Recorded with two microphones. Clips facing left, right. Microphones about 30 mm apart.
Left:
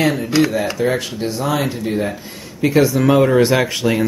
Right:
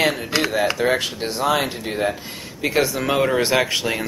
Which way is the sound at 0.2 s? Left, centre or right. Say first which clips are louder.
Left 4 dB; centre.